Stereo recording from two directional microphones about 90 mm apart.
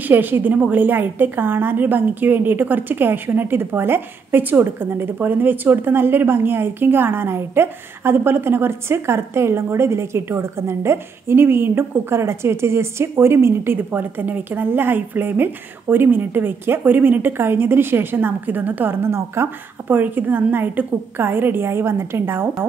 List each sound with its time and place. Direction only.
0.1 s a woman's voice: 20° right (ahead or behind)